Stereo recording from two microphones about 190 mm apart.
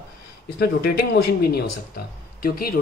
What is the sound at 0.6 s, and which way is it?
Speech, 55° left (ahead or behind).